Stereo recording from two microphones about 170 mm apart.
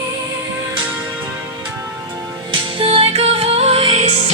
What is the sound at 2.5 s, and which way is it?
Music, 30° right (ahead or behind).